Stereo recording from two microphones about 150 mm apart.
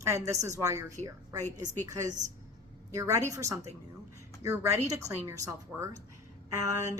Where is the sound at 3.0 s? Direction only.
20° right (ahead or behind).